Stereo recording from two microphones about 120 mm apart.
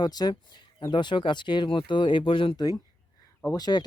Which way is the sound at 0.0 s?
35° left (ahead or behind).